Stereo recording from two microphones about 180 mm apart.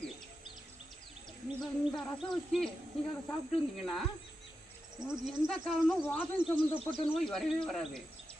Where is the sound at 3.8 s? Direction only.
Centre (ahead or behind).